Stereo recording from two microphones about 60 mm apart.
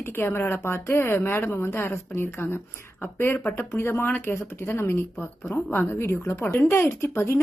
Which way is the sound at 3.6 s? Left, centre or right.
Left.